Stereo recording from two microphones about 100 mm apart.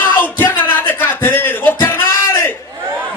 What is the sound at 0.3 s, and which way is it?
Music, 20° left (ahead or behind).